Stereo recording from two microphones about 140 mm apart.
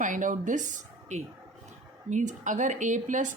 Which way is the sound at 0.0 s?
65° right (ahead or behind).